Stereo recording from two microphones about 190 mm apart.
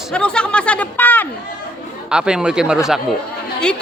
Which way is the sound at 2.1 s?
5° right (ahead or behind).